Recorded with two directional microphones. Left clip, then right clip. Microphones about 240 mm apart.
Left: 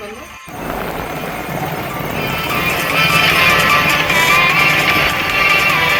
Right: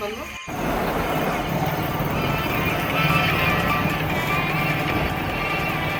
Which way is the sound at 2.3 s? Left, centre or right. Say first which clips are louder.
Left 9 dB; left.